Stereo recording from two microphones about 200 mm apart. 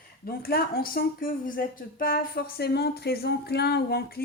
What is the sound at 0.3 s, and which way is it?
Speech, 50° left (ahead or behind).